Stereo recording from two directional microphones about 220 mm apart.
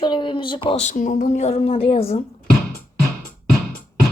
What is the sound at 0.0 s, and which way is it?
Speech, 20° left (ahead or behind).